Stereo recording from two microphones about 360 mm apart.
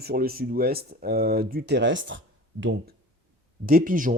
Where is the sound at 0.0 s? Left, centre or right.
Right.